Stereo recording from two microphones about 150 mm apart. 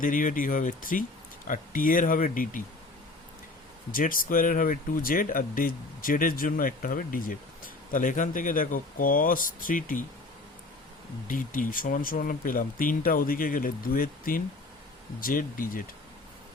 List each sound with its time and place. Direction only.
0.0 s speech: 60° left (ahead or behind)
3.9 s speech: 65° left (ahead or behind)
11.3 s speech: 60° left (ahead or behind)